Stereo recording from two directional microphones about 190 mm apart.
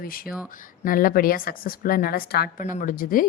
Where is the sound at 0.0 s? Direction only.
50° left (ahead or behind).